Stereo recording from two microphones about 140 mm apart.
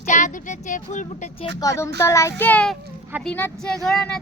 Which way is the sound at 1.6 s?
20° left (ahead or behind).